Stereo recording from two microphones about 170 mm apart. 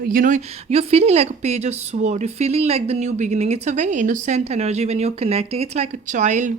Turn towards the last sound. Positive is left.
turn(degrees=-45)  # may be behind; listen again after turning